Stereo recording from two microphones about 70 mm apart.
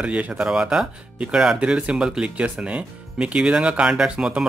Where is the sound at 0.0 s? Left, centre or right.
Centre.